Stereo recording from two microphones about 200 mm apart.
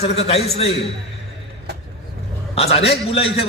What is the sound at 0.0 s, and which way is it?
Speech, 30° left (ahead or behind).